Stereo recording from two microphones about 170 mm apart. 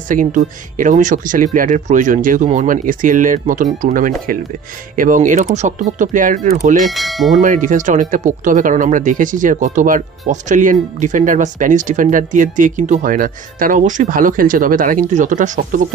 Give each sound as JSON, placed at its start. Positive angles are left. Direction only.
{"t": 0.1, "sound": "speech", "side_deg": -50}
{"t": 6.9, "sound": "speech", "side_deg": 0}
{"t": 7.3, "sound": "speech", "side_deg": -50}